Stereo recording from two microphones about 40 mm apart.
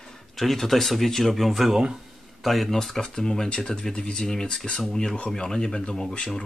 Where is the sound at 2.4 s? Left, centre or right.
Centre.